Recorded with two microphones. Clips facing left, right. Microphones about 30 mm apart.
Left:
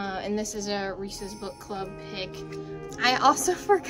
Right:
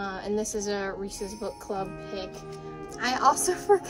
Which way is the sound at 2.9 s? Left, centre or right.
Left.